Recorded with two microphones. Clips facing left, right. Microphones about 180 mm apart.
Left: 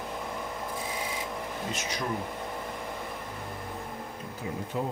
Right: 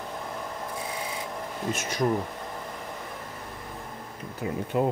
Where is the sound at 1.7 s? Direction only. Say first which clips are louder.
Right 2 dB; 50° right (ahead or behind).